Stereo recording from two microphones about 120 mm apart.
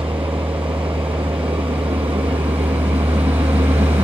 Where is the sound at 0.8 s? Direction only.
45° right (ahead or behind).